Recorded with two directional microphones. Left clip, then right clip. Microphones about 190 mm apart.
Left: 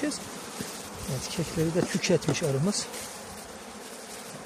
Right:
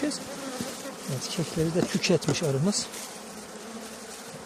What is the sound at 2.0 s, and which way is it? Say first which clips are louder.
Speech: right 1 dB; 15° right (ahead or behind).